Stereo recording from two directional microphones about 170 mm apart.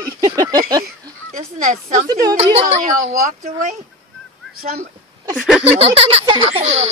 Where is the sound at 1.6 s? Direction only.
50° right (ahead or behind).